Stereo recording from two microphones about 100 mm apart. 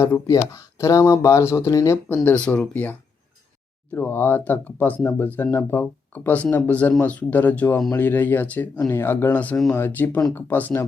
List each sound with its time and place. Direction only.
0.0 s speech: 30° left (ahead or behind)
2.0 s speech: 20° left (ahead or behind)
3.9 s speech: 20° left (ahead or behind)